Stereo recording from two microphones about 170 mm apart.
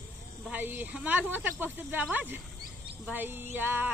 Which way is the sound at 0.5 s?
10° right (ahead or behind).